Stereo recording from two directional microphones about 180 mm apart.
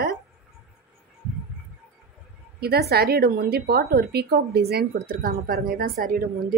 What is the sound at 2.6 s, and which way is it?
A woman's voice, 60° right (ahead or behind).